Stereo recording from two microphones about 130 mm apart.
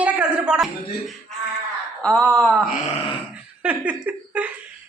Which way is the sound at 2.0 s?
10° left (ahead or behind).